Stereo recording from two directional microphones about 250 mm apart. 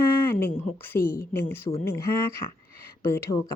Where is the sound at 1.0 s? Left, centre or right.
Left.